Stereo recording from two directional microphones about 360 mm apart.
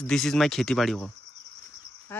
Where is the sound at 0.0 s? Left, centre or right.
Centre.